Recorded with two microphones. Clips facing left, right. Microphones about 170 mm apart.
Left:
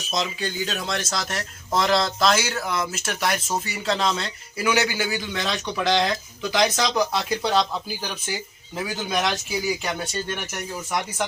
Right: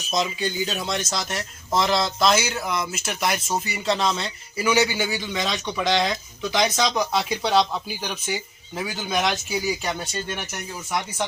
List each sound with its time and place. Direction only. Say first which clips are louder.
0.1 s speech: right 2 dB; 5° right (ahead or behind)